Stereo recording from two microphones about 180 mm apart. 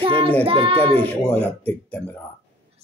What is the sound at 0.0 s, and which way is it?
Child singing, 30° right (ahead or behind).